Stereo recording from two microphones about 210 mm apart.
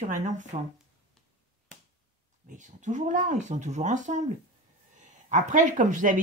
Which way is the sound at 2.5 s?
35° right (ahead or behind).